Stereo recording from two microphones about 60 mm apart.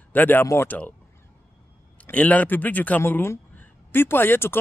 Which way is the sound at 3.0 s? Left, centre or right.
Left.